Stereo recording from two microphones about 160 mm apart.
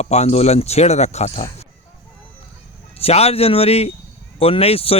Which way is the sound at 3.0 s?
40° left (ahead or behind).